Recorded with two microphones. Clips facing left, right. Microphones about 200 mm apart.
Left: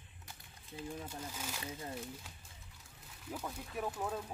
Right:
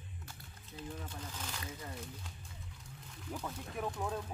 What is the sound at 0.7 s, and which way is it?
Speech, 10° left (ahead or behind).